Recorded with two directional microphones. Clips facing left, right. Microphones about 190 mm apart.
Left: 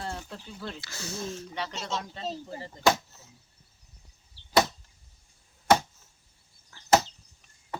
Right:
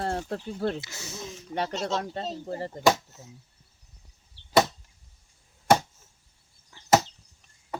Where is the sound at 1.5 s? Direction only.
50° right (ahead or behind).